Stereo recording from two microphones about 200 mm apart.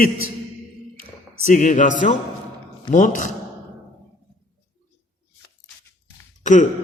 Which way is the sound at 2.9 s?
40° left (ahead or behind).